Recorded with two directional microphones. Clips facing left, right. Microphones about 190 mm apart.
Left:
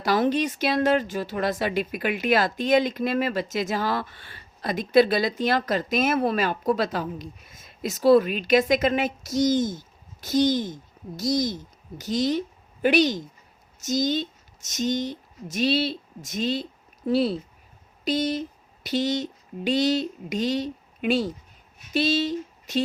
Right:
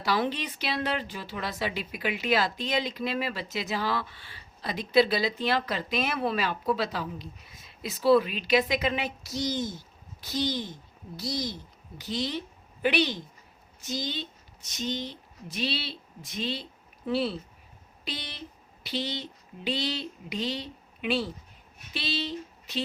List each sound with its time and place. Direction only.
0.0 s a woman's voice: 45° left (ahead or behind)